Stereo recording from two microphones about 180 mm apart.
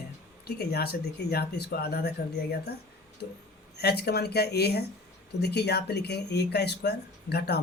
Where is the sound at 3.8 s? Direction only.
65° left (ahead or behind).